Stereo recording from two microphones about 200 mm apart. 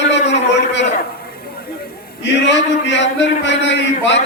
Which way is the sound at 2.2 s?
60° left (ahead or behind).